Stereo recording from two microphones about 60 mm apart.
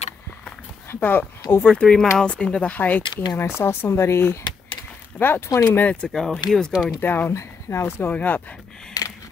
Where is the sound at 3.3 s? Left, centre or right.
Left.